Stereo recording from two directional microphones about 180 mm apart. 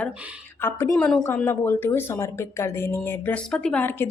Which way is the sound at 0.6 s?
15° left (ahead or behind).